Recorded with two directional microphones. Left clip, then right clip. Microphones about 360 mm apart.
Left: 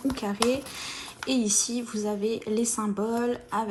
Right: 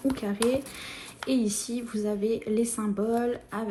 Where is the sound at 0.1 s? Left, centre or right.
Centre.